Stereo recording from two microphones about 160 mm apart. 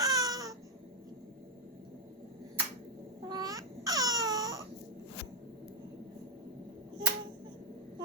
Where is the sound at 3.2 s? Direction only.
25° right (ahead or behind).